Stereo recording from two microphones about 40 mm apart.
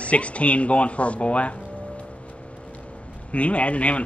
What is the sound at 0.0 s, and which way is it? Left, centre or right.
Speech, left.